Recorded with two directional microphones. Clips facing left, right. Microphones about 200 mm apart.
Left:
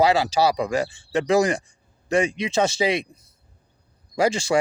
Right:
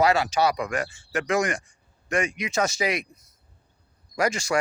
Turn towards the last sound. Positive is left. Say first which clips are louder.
# left 4 dB
turn(degrees=30)  # may be behind; listen again after turning